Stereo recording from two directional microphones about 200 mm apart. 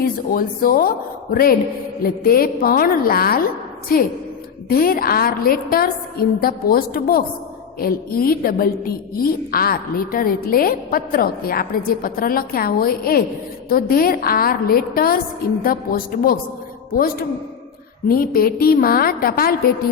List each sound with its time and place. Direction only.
0.0 s a woman's voice: 45° left (ahead or behind)
18.1 s a woman's voice: 45° left (ahead or behind)